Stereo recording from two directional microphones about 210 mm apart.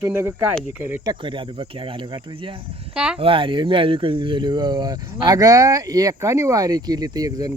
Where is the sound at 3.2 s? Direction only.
25° right (ahead or behind).